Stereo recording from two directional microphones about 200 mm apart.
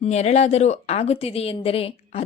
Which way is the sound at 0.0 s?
35° left (ahead or behind).